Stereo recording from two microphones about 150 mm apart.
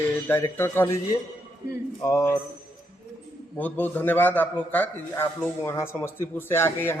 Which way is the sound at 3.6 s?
10° left (ahead or behind).